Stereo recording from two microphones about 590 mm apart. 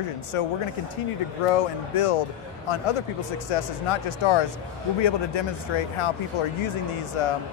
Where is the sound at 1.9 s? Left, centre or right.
Left.